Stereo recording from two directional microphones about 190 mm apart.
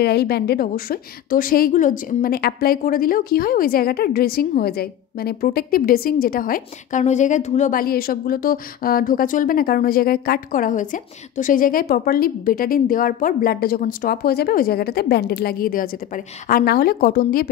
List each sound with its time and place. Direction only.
0.0 s a woman's voice: 60° left (ahead or behind)